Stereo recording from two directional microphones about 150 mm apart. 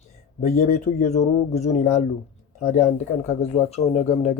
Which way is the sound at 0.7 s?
50° left (ahead or behind).